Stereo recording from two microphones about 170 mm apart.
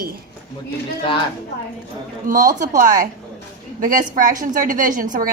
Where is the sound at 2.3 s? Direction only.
55° right (ahead or behind).